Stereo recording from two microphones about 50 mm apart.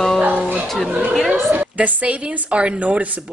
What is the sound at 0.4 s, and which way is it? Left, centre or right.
Music, right.